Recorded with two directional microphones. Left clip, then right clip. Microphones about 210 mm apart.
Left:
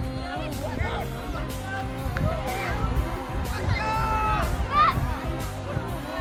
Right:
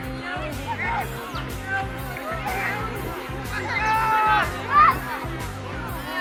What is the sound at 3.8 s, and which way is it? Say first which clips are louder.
Music: right 6 dB; 55° left (ahead or behind).